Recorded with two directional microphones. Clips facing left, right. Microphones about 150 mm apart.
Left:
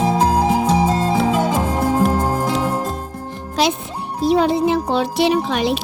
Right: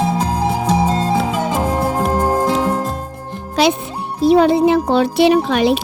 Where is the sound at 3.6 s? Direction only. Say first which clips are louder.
Right 4 dB; 65° right (ahead or behind).